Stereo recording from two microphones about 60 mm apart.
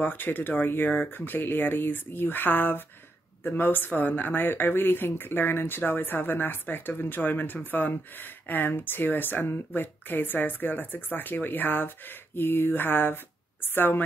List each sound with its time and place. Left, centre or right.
0.0 s speech: left